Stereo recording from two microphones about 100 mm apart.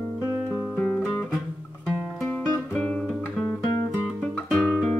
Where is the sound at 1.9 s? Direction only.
10° left (ahead or behind).